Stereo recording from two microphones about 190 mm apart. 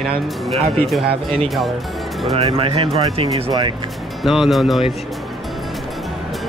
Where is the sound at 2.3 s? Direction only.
30° right (ahead or behind).